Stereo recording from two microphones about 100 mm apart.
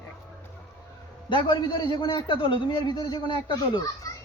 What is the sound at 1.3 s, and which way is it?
A man's voice, 50° left (ahead or behind).